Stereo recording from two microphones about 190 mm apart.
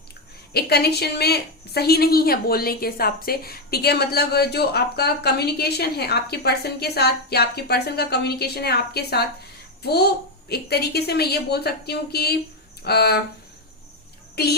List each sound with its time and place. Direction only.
0.5 s a woman's voice: 60° left (ahead or behind)
14.4 s a woman's voice: 55° left (ahead or behind)